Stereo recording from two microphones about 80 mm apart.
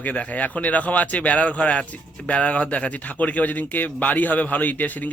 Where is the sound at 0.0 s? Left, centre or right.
Centre.